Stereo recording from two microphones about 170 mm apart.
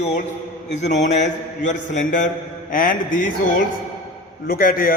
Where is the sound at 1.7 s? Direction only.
50° left (ahead or behind).